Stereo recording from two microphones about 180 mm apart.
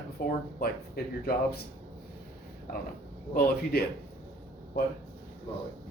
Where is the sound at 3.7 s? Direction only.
60° left (ahead or behind).